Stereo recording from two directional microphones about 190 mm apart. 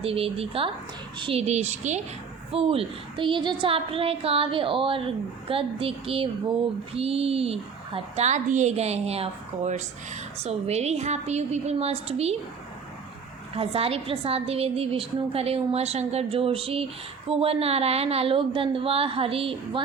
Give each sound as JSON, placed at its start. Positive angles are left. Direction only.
{"t": 0.0, "sound": "a woman's voice", "side_deg": -30}
{"t": 13.5, "sound": "a woman's voice", "side_deg": -30}